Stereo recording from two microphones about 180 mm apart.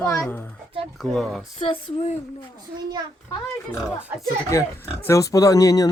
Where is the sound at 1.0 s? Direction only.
Centre (ahead or behind).